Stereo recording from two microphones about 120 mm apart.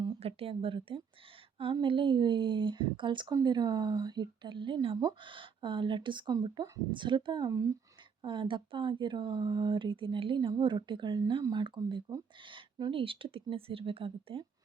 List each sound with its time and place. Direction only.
0.2 s speech: 55° right (ahead or behind); by 7.8 s 25° right (ahead or behind)
8.2 s speech: 45° right (ahead or behind)